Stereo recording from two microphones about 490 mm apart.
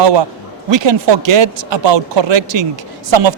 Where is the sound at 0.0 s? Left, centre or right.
Right.